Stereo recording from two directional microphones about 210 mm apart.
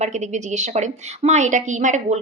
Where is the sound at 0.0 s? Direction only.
35° right (ahead or behind).